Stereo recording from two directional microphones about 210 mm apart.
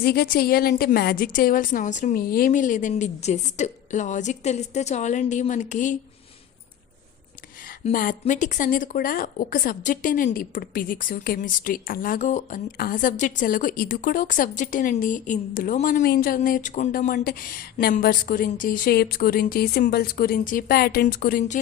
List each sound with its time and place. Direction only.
0.0 s a woman's voice: 50° left (ahead or behind)
7.9 s a woman's voice: 40° left (ahead or behind)